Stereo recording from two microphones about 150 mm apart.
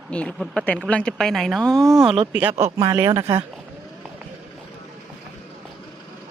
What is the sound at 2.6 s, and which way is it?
Speech, 20° right (ahead or behind).